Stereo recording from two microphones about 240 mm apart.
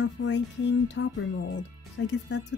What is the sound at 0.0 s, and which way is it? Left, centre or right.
Speech, left.